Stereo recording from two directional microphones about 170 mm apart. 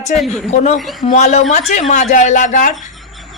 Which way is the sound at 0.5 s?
45° left (ahead or behind).